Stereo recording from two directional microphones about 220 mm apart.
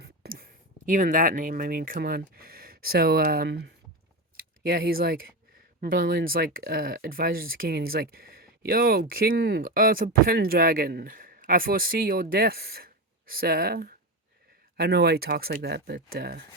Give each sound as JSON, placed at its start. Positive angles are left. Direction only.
{"t": 0.0, "sound": "speech", "side_deg": -45}